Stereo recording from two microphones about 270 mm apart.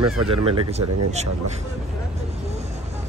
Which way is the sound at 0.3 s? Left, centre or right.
Right.